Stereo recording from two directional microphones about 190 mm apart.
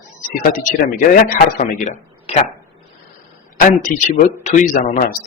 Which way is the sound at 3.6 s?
45° left (ahead or behind).